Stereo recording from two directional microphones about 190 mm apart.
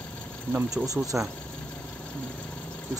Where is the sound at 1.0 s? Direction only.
5° right (ahead or behind).